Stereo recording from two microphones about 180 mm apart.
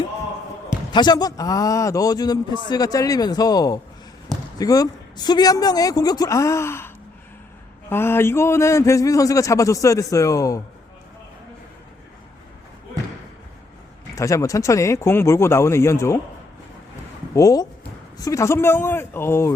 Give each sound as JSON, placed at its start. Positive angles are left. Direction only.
{"t": 0.9, "sound": "a man's voice", "side_deg": 20}
{"t": 14.2, "sound": "a man's voice", "side_deg": 15}
{"t": 17.3, "sound": "a man's voice", "side_deg": 20}